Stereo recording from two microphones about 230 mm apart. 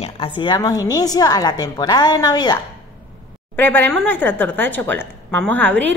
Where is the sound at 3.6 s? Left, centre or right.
Centre.